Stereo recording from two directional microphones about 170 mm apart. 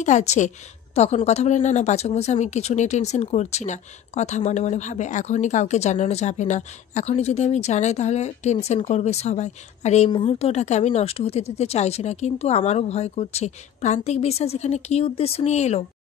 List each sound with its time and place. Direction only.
0.0 s a woman's voice: 45° left (ahead or behind)